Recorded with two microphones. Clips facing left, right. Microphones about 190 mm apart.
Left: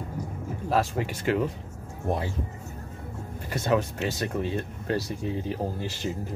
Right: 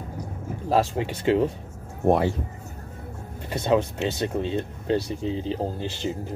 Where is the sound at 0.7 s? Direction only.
30° right (ahead or behind).